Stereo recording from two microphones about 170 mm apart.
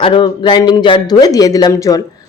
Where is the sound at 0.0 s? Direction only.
30° left (ahead or behind).